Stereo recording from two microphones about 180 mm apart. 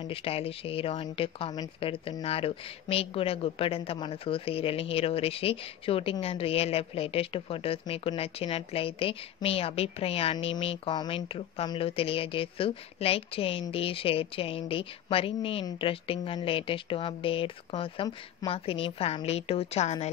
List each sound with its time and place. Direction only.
0.0 s speech: 30° left (ahead or behind)